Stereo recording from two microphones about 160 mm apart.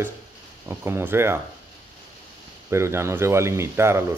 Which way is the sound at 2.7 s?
15° right (ahead or behind).